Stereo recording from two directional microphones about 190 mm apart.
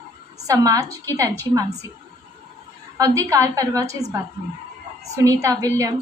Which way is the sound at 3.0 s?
15° right (ahead or behind).